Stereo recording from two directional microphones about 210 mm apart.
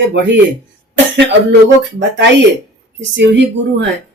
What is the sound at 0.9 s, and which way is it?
Cough, 55° right (ahead or behind).